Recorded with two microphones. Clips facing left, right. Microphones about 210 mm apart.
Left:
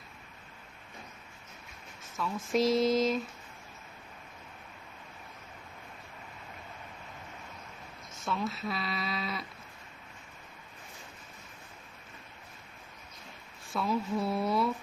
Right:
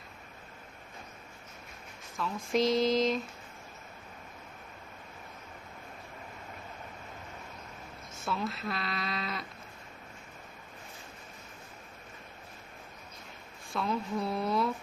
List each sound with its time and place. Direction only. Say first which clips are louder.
2.1 s speech: even; centre (ahead or behind)
8.2 s speech: left 1 dB; centre (ahead or behind)
13.7 s speech: left 2 dB; centre (ahead or behind)